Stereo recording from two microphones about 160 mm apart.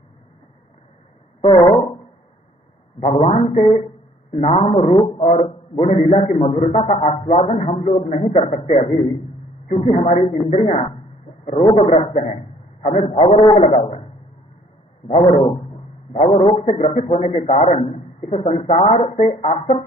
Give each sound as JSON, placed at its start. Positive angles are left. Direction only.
{"t": 1.4, "sound": "speech", "side_deg": 35}
{"t": 3.0, "sound": "a man's voice", "side_deg": 40}
{"t": 15.0, "sound": "a man's voice", "side_deg": 35}